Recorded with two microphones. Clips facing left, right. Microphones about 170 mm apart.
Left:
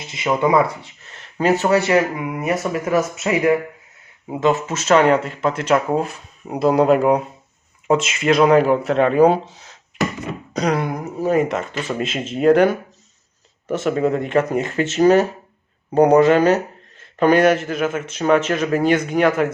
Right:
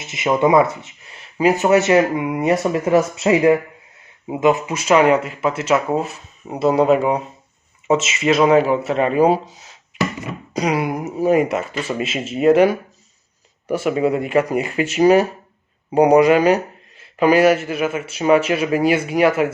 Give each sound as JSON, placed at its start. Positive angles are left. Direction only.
{"t": 0.0, "sound": "speech", "side_deg": -20}
{"t": 1.1, "sound": "speech", "side_deg": -10}
{"t": 4.3, "sound": "speech", "side_deg": -15}